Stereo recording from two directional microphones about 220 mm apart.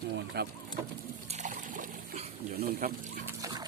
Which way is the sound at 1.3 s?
35° right (ahead or behind).